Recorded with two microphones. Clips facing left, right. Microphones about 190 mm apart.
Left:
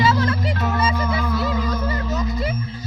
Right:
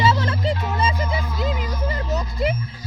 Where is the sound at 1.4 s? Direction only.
15° right (ahead or behind).